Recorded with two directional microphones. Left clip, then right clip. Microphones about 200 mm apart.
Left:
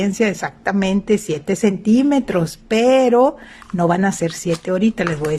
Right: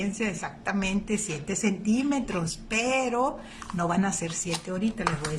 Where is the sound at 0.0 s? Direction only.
40° left (ahead or behind).